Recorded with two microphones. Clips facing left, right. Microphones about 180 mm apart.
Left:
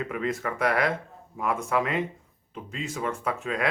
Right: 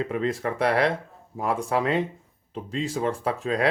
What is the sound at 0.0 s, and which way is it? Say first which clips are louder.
Speech: right 3 dB; 30° right (ahead or behind).